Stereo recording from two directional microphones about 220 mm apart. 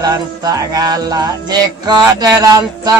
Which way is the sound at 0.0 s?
15° right (ahead or behind).